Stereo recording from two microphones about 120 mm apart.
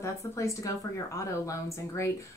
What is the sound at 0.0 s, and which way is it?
Speech, 25° left (ahead or behind).